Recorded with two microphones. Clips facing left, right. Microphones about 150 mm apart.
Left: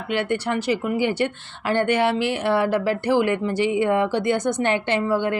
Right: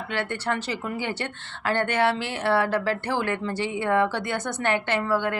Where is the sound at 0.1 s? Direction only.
15° left (ahead or behind).